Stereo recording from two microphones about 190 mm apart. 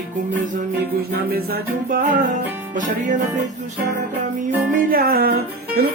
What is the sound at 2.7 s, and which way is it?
Music, 45° right (ahead or behind).